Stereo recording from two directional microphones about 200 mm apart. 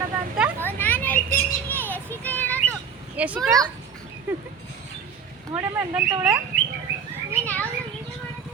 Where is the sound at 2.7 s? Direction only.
5° right (ahead or behind).